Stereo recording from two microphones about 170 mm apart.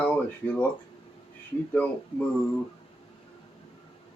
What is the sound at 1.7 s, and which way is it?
Speech, 10° left (ahead or behind).